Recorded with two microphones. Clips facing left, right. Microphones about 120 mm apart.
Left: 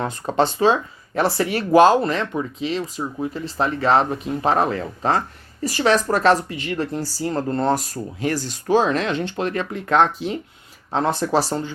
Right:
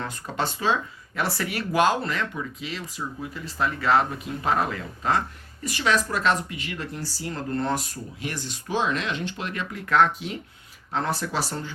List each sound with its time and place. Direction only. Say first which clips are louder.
0.0 s speech: left 9 dB; 30° left (ahead or behind)